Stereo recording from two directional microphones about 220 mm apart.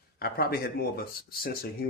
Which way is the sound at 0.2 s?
45° left (ahead or behind).